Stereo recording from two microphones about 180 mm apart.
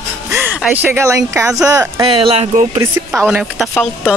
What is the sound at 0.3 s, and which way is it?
Speech, 10° right (ahead or behind).